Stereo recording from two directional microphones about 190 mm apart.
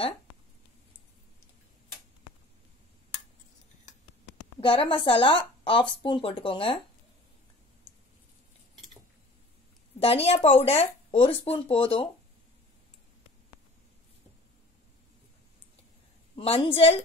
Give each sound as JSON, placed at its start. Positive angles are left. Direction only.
{"t": 4.6, "sound": "a woman's voice", "side_deg": 30}
{"t": 9.9, "sound": "a woman's voice", "side_deg": 30}
{"t": 16.3, "sound": "speech", "side_deg": 30}